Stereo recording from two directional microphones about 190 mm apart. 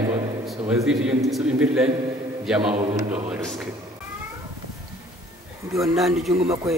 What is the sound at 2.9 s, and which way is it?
Speech, 35° right (ahead or behind).